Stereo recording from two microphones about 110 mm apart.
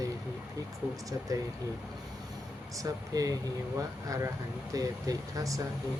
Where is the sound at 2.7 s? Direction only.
30° right (ahead or behind).